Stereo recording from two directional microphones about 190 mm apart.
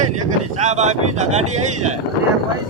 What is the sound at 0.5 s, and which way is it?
Speech, 35° right (ahead or behind).